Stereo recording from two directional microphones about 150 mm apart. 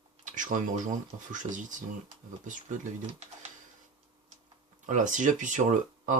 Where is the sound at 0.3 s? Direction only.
60° right (ahead or behind).